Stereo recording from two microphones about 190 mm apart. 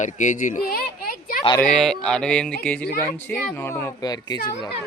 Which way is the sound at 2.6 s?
5° left (ahead or behind).